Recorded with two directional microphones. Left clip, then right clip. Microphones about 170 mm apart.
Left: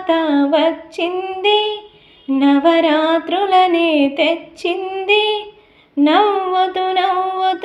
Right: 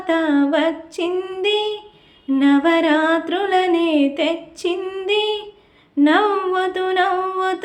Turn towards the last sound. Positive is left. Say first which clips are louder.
# left 4 dB
turn(degrees=0)  # may be behind; listen again after turning